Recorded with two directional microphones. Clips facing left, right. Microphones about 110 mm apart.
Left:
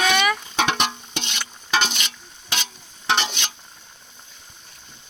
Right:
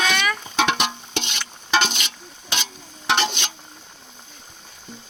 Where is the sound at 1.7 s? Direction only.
30° right (ahead or behind).